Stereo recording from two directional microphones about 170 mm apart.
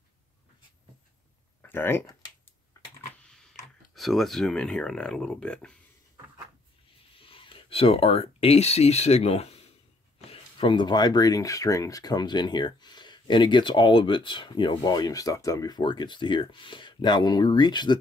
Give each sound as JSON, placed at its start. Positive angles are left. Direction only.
{"t": 1.6, "sound": "speech", "side_deg": 15}
{"t": 2.8, "sound": "typing", "side_deg": 15}
{"t": 3.9, "sound": "speech", "side_deg": 0}
{"t": 7.2, "sound": "speech", "side_deg": 30}